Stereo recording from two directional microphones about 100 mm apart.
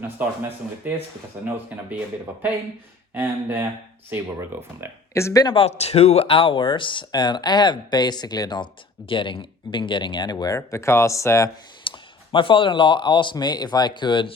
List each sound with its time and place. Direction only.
0.2 s speech: 20° right (ahead or behind)
3.2 s speech: 20° right (ahead or behind)
5.1 s speech: 30° left (ahead or behind)
5.5 s speech: 90° left; by 10.3 s 50° left (ahead or behind)
10.3 s speech: 35° left (ahead or behind)
11.8 s speech: 60° left (ahead or behind)
13.3 s speech: 45° left (ahead or behind)